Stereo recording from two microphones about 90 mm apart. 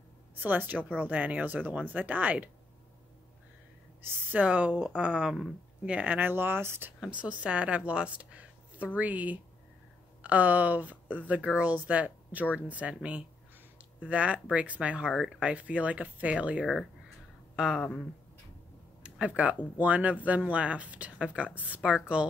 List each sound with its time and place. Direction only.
0.4 s a woman's voice: 20° right (ahead or behind)
4.1 s speech: 20° right (ahead or behind)
7.2 s a woman's voice: 15° right (ahead or behind)
19.0 s speech: 10° right (ahead or behind)